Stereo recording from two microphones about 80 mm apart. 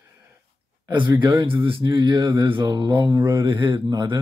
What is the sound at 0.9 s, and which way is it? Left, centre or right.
Speech, right.